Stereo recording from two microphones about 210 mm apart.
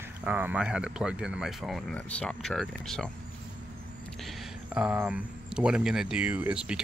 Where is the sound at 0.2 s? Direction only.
5° right (ahead or behind).